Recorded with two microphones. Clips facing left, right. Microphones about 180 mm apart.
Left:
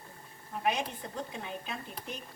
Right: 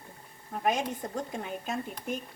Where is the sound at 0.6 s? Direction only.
45° right (ahead or behind).